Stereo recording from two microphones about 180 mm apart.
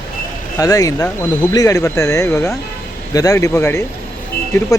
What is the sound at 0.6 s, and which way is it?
Speech, 20° left (ahead or behind).